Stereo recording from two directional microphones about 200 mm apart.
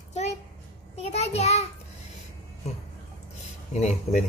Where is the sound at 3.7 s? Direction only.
35° left (ahead or behind).